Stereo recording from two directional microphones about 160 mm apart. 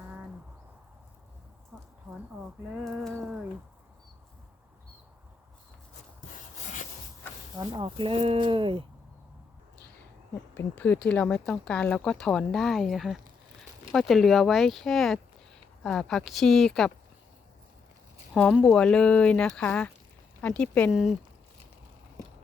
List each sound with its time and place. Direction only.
1.7 s a sound: 5° right (ahead or behind)
2.8 s speech: 5° left (ahead or behind)
6.2 s rub: 50° left (ahead or behind)
7.5 s speech: 30° right (ahead or behind)
10.3 s speech: 15° left (ahead or behind)
18.3 s speech: centre (ahead or behind)